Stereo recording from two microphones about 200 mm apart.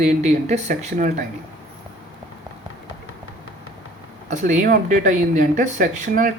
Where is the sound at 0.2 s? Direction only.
35° right (ahead or behind).